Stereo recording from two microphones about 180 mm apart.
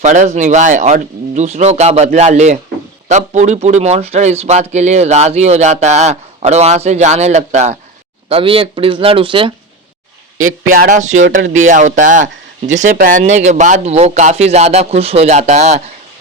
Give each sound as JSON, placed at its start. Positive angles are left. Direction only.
{"t": 0.0, "sound": "speech", "side_deg": -40}
{"t": 10.8, "sound": "speech", "side_deg": -45}